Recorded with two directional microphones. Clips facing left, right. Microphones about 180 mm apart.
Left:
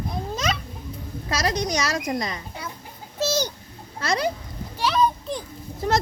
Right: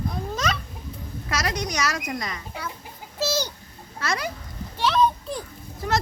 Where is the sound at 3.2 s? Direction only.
15° left (ahead or behind).